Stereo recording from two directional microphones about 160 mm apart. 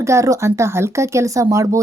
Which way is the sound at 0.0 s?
20° right (ahead or behind).